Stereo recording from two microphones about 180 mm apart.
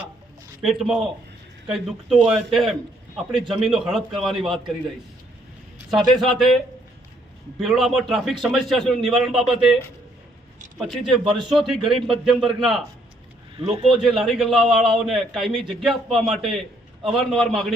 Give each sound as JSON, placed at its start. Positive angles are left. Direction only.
{"t": 0.6, "sound": "a man's voice", "side_deg": -5}
{"t": 5.9, "sound": "a man's voice", "side_deg": 0}
{"t": 7.6, "sound": "a man's voice", "side_deg": 0}
{"t": 10.8, "sound": "a man's voice", "side_deg": 0}
{"t": 11.3, "sound": "speech", "side_deg": -25}
{"t": 11.5, "sound": "a man's voice", "side_deg": 0}
{"t": 13.6, "sound": "speech", "side_deg": -30}
{"t": 13.9, "sound": "a man's voice", "side_deg": 0}